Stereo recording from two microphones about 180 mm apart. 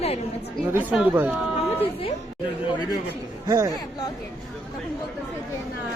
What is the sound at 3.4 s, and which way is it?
Speech, 20° right (ahead or behind).